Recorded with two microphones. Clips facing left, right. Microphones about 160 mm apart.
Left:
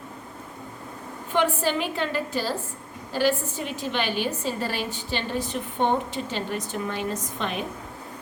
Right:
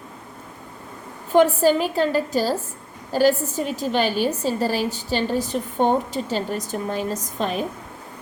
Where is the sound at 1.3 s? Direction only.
40° right (ahead or behind).